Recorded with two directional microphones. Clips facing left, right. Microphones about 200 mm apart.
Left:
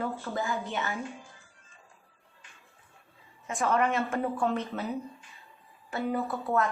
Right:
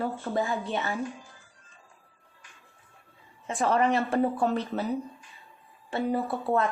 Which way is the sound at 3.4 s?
30° right (ahead or behind).